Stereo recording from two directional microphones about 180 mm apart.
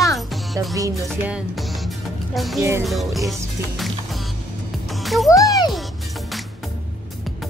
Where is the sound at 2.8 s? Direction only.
Centre (ahead or behind).